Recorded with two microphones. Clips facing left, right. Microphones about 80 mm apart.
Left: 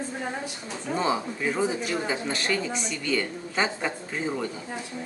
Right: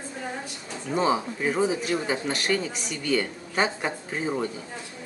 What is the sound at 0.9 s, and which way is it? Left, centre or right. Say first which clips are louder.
Speech: right 3 dB; centre.